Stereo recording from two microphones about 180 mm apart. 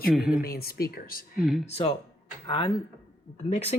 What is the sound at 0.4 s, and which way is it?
Speech, 60° left (ahead or behind).